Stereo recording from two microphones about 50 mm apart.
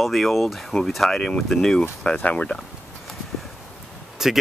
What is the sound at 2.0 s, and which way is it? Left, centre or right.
Speech, left.